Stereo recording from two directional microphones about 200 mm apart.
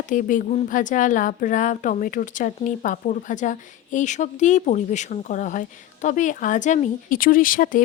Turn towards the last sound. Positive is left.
turn(degrees=45)  # may be behind; listen again after turning